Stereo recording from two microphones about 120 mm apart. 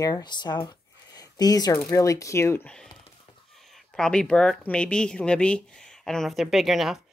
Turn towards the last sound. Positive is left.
turn(degrees=0)  # may be behind; listen again after turning